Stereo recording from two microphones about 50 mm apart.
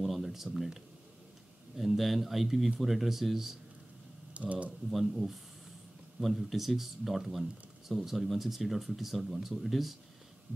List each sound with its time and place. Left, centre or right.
0.0 s a sound: centre
1.8 s speech: centre
4.3 s speech: right
4.9 s speech: centre